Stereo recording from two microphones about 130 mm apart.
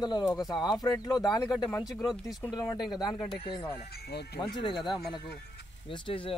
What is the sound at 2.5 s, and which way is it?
Speech, 30° left (ahead or behind).